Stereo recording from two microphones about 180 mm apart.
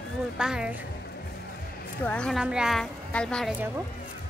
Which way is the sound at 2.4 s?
5° right (ahead or behind).